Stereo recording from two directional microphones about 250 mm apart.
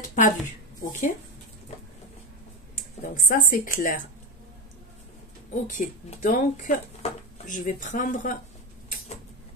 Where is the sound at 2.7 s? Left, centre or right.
Left.